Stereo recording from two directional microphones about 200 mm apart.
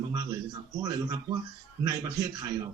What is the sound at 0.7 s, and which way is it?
A man's voice, 20° right (ahead or behind).